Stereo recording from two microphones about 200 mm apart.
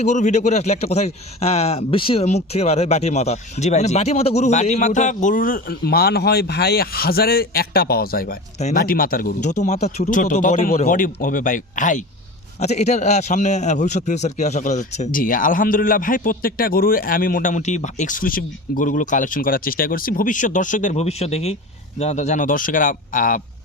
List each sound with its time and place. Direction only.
0.0 s a man's voice: 35° left (ahead or behind)